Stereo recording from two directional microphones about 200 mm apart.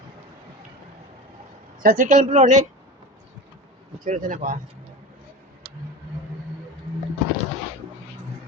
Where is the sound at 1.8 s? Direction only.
40° right (ahead or behind).